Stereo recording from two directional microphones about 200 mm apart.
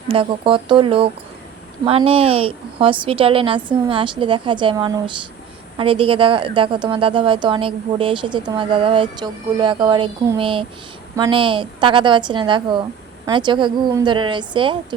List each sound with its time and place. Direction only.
0.1 s a woman's voice: 25° right (ahead or behind)